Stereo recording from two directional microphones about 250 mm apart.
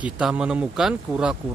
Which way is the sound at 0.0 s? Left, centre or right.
Centre.